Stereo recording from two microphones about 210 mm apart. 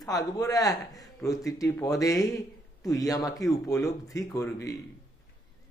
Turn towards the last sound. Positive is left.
turn(degrees=15)  # may be behind; listen again after turning